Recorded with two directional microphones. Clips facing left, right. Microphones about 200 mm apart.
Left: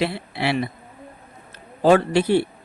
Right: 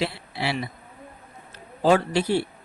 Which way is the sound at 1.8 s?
60° left (ahead or behind).